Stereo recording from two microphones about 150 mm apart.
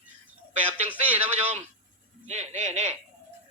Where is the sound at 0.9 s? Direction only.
10° right (ahead or behind).